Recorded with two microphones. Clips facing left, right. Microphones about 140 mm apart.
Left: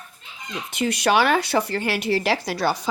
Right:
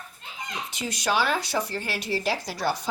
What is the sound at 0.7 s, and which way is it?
Speech, 65° left (ahead or behind).